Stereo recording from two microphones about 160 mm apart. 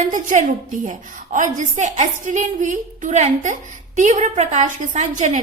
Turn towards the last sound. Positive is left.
turn(degrees=-50)  # may be behind; listen again after turning